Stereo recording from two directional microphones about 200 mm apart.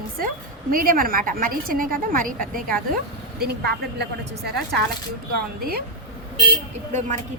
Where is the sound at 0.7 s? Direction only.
45° right (ahead or behind).